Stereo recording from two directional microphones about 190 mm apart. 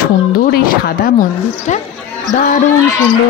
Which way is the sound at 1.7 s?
40° left (ahead or behind).